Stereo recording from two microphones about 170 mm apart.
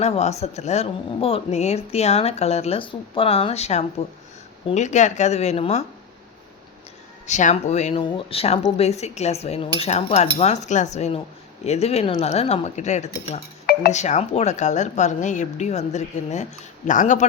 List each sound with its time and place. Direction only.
0.0 s a woman's voice: 40° left (ahead or behind)
7.3 s a woman's voice: 45° left (ahead or behind)